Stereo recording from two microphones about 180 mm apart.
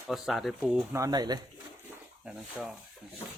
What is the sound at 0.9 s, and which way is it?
Speech, 20° right (ahead or behind).